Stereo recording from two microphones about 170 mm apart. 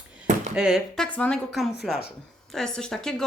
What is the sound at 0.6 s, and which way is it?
Speech, 5° right (ahead or behind).